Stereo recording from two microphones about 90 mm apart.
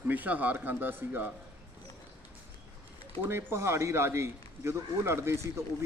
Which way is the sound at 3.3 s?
30° right (ahead or behind).